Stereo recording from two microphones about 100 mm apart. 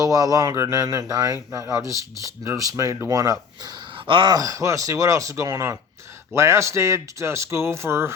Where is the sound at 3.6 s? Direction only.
40° right (ahead or behind).